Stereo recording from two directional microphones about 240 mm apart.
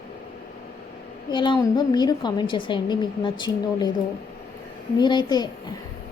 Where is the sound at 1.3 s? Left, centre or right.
Centre.